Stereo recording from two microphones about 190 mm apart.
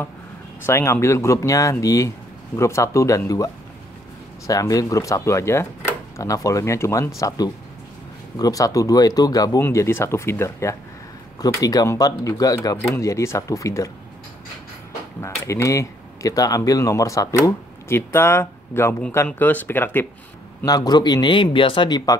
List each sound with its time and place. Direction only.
0.7 s speech: 15° left (ahead or behind)
15.1 s speech: 15° left (ahead or behind)